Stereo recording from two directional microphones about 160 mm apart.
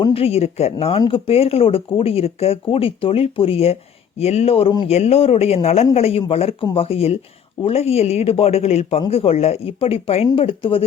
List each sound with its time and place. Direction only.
0.0 s speech: 35° left (ahead or behind)